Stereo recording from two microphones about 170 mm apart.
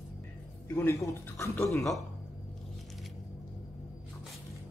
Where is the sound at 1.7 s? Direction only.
Centre (ahead or behind).